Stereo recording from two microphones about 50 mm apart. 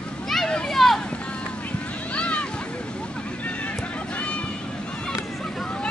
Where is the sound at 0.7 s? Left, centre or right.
Centre.